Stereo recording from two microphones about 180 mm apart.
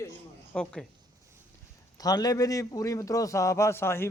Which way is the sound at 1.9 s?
20° left (ahead or behind).